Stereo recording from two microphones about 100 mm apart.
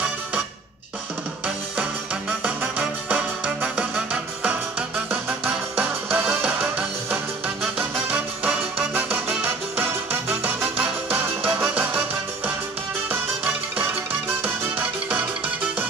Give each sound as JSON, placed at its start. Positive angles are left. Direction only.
{"t": 1.8, "sound": "music", "side_deg": -10}
{"t": 13.1, "sound": "music", "side_deg": -15}